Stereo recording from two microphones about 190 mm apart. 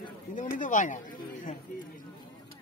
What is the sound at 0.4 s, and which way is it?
Speech, 45° left (ahead or behind).